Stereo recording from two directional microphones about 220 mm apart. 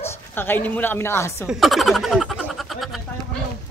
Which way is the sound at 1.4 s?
Centre (ahead or behind).